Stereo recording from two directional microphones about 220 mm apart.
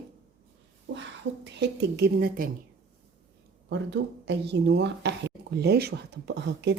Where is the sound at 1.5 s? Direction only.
50° right (ahead or behind).